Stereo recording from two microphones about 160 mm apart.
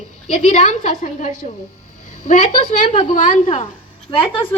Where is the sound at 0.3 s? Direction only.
50° left (ahead or behind).